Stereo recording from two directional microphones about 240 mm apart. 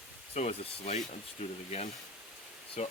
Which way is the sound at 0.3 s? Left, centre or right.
Left.